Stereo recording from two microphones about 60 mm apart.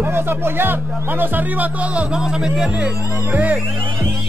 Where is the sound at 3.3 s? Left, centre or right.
Right.